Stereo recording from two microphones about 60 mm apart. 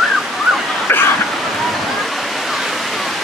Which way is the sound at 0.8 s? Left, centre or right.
Left.